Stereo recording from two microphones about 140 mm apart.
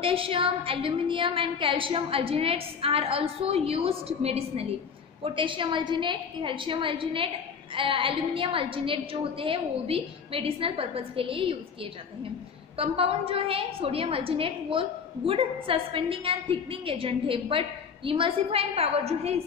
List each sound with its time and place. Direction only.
0.0 s a woman's voice: 40° right (ahead or behind)